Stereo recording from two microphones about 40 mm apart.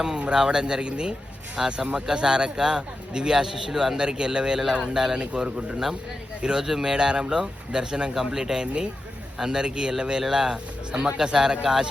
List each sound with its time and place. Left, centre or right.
0.3 s a man's voice: centre
3.9 s a man's voice: centre
5.2 s a man's voice: right
8.6 s a man's voice: right; by 11.9 s centre